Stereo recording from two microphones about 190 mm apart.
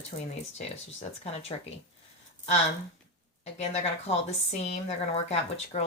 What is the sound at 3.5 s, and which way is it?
Speech, 35° left (ahead or behind).